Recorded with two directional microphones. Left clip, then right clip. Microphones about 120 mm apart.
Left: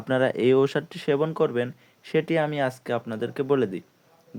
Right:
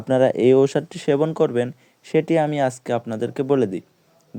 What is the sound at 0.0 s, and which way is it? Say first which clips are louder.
Speech: right 6 dB; 20° right (ahead or behind).